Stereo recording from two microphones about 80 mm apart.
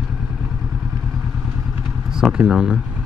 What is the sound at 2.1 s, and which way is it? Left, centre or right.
Speech, centre.